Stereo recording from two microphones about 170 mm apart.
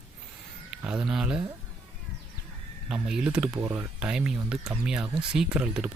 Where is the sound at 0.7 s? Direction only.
5° right (ahead or behind).